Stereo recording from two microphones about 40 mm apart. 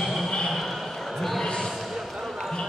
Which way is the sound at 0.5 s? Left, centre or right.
Centre.